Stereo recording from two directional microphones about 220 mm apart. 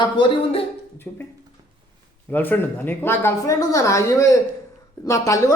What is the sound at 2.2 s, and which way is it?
A woman's voice, 10° left (ahead or behind).